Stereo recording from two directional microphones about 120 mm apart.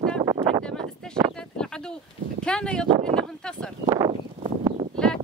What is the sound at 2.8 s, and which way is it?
Speech, 45° right (ahead or behind).